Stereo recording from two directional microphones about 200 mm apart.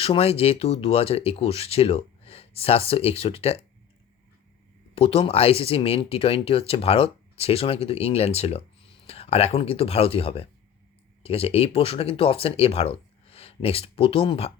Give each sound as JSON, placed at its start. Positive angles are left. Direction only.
{"t": 0.0, "sound": "speech", "side_deg": 30}
{"t": 4.9, "sound": "speech", "side_deg": 30}